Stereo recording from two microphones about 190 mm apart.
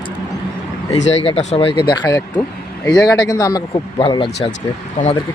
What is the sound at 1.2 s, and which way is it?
Speech, 35° left (ahead or behind).